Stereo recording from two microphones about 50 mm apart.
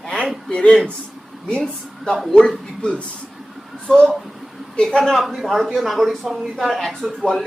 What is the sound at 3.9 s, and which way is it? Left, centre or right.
Speech, centre.